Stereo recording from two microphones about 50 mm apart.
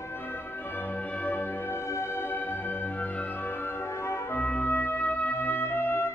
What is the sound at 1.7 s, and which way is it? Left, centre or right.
Music, left.